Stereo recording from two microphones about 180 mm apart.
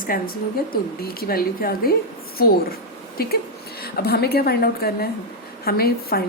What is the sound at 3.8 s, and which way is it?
A woman's voice, 60° left (ahead or behind).